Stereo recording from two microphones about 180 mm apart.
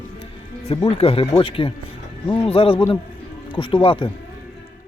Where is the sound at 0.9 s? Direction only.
30° left (ahead or behind).